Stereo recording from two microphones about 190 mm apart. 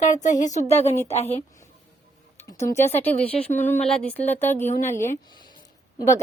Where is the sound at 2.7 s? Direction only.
35° left (ahead or behind).